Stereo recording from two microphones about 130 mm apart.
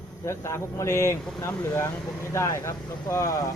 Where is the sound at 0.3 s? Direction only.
20° left (ahead or behind).